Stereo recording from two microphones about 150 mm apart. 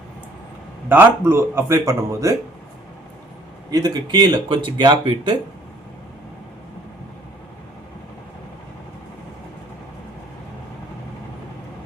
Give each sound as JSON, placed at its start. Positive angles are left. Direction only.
{"t": 0.9, "sound": "speech", "side_deg": -15}
{"t": 3.7, "sound": "speech", "side_deg": -25}